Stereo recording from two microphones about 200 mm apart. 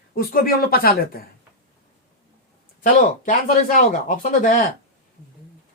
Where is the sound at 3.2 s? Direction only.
40° left (ahead or behind).